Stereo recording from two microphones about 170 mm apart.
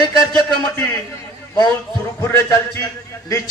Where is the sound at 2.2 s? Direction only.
15° left (ahead or behind).